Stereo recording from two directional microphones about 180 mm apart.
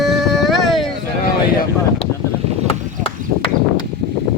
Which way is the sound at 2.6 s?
30° left (ahead or behind).